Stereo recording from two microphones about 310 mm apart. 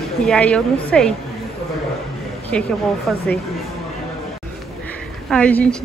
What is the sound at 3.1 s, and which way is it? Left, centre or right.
Speech, centre.